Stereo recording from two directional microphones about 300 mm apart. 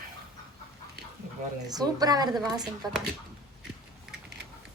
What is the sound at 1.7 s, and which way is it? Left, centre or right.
A woman's voice, centre.